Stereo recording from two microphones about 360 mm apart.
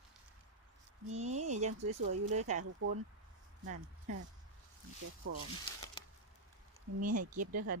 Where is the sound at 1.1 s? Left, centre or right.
Centre.